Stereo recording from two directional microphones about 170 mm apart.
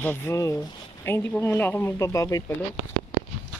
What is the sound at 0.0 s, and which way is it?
Speech, 15° left (ahead or behind).